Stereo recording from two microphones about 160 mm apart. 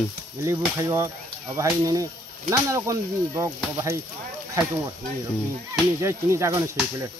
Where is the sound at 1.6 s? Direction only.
20° right (ahead or behind).